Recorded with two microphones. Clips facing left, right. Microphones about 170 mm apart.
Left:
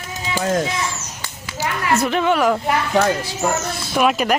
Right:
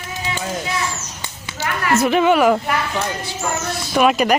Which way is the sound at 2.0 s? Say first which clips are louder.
Right 5 dB; 5° right (ahead or behind).